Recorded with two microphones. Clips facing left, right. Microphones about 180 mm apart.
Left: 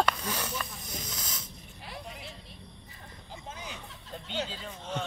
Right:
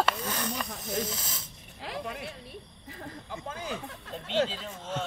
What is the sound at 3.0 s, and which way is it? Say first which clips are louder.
Speech: right 6 dB; 60° right (ahead or behind).